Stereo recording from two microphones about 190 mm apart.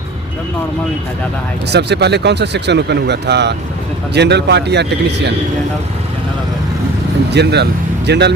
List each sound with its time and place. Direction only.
1.7 s speech: 60° right (ahead or behind)
7.3 s speech: 60° right (ahead or behind)